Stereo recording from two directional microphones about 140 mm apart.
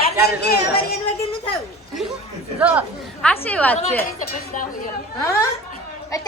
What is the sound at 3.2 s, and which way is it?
Speech, 10° left (ahead or behind).